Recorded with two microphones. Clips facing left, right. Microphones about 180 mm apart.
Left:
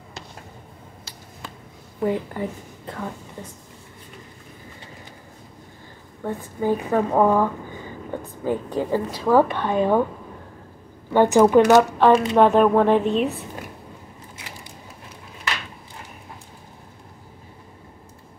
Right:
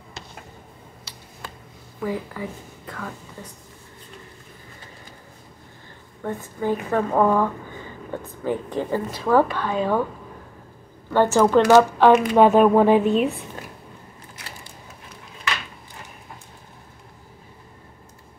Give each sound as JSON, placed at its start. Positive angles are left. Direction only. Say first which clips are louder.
{"t": 2.0, "sound": "speech", "louder": "left 4 dB", "side_deg": 25}
{"t": 6.2, "sound": "a woman's voice", "louder": "left 2 dB", "side_deg": 10}
{"t": 11.1, "sound": "a woman's voice", "louder": "left 2 dB", "side_deg": 15}
{"t": 11.6, "sound": "speech", "louder": "right 1 dB", "side_deg": 0}
{"t": 12.1, "sound": "speech", "louder": "right 1 dB", "side_deg": 25}
{"t": 12.4, "sound": "speech", "louder": "right 1 dB", "side_deg": -5}